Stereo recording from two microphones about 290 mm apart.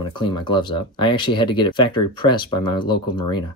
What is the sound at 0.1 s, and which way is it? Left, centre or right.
Speech, centre.